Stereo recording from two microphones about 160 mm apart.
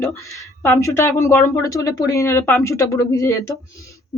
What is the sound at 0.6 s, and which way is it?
Speech, 15° left (ahead or behind).